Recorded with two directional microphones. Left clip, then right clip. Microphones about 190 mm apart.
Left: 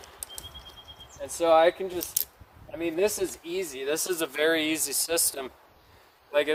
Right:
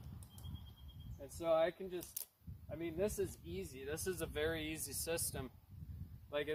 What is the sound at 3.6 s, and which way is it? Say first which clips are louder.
Speech: left 16 dB; 10° left (ahead or behind).